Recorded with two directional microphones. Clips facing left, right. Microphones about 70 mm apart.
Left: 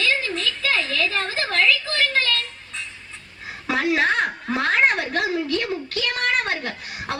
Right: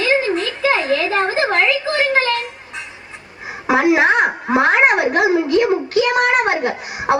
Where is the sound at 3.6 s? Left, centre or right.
Centre.